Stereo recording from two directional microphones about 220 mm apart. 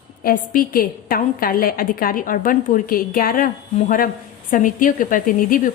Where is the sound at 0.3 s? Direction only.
40° left (ahead or behind).